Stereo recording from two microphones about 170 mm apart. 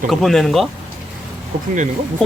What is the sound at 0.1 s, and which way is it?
Speech, centre (ahead or behind).